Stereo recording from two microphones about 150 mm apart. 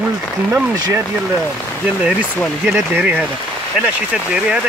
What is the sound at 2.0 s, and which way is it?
Speech, 10° right (ahead or behind).